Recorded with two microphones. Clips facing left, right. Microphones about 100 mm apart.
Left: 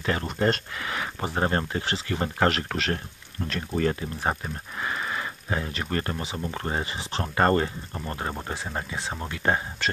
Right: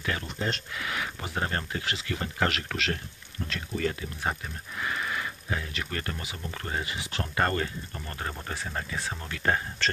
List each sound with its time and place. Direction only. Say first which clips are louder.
0.2 s speech: left 8 dB; 50° left (ahead or behind)
0.8 s speech: left 4 dB; 35° left (ahead or behind)